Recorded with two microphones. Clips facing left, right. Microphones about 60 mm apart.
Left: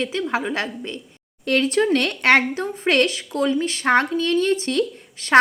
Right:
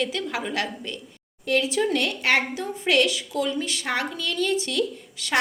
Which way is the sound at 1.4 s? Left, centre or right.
Left.